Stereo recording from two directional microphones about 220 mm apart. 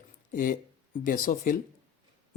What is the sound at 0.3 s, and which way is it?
Speech, 40° left (ahead or behind).